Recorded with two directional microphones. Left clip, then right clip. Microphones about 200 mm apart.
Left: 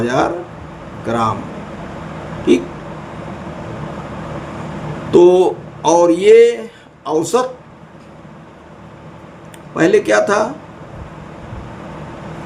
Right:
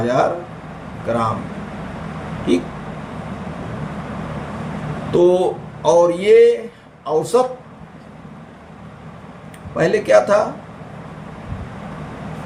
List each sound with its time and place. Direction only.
0.0 s speech: 35° left (ahead or behind)
5.1 s a man's voice: 35° left (ahead or behind)
9.7 s speech: 40° left (ahead or behind)